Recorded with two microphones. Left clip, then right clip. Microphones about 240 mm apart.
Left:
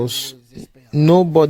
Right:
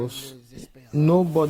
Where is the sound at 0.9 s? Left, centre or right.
Left.